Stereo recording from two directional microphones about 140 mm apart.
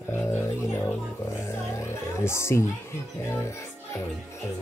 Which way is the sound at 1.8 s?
20° left (ahead or behind).